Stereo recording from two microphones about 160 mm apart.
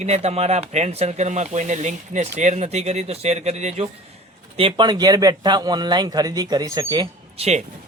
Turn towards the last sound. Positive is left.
turn(degrees=-45)  # may be behind; listen again after turning